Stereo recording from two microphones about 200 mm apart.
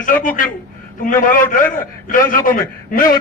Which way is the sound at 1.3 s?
40° left (ahead or behind).